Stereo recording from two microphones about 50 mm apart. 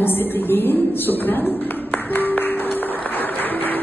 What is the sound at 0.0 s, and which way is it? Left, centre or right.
A woman's voice, left.